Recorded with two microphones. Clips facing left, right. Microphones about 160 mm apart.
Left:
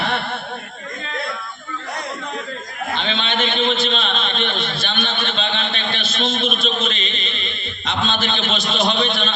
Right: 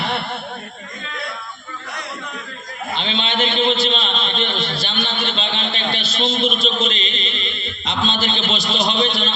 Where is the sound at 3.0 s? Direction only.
30° right (ahead or behind).